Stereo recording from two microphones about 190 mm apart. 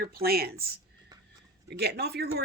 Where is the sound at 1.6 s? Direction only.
55° right (ahead or behind).